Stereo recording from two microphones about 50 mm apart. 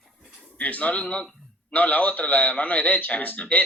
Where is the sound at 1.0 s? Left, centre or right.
Centre.